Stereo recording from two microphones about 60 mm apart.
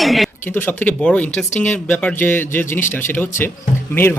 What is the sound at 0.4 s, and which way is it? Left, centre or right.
Speech, left.